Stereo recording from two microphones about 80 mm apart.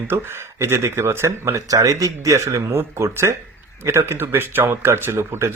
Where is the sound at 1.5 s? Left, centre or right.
Right.